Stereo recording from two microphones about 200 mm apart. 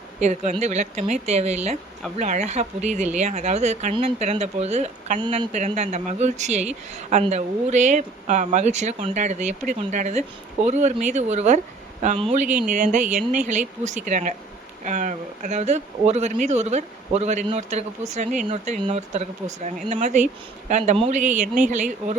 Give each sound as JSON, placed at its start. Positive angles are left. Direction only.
{"t": 0.2, "sound": "speech", "side_deg": -35}
{"t": 5.2, "sound": "speech", "side_deg": -20}
{"t": 5.5, "sound": "speech", "side_deg": -35}